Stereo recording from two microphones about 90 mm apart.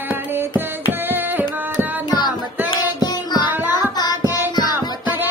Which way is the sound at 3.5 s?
20° right (ahead or behind).